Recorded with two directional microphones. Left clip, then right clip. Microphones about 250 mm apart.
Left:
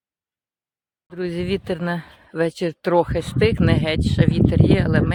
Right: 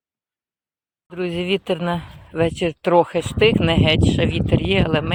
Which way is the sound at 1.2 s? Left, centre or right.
Centre.